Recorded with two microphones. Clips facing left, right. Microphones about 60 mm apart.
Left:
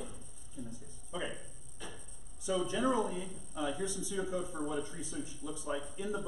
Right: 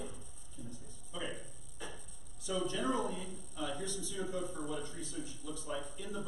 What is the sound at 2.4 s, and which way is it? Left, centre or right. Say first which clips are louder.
A man's voice: left 3 dB; centre.